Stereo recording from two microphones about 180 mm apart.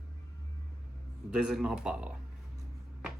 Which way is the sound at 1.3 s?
5° right (ahead or behind).